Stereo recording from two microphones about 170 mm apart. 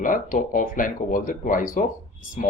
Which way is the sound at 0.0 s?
50° left (ahead or behind).